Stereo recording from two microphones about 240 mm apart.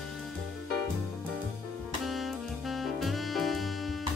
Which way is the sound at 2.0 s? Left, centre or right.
Centre.